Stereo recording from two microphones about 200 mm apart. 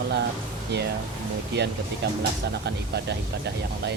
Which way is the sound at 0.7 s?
55° right (ahead or behind).